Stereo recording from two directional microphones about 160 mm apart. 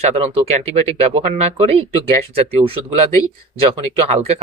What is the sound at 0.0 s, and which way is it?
Speech, 40° right (ahead or behind).